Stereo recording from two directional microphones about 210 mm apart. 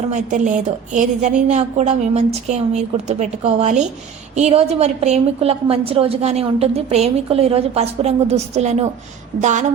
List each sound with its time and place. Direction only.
0.1 s a woman's voice: 35° right (ahead or behind)